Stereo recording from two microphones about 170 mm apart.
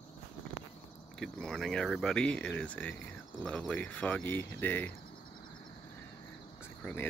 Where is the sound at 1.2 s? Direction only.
5° left (ahead or behind).